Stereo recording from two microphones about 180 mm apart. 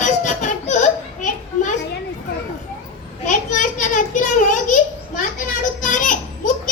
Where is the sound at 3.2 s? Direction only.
45° left (ahead or behind).